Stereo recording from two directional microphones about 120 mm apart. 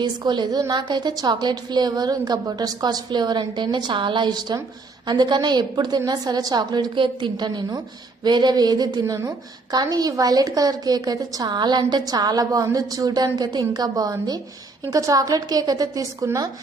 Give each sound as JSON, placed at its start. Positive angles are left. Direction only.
{"t": 0.0, "sound": "a woman's voice", "side_deg": -40}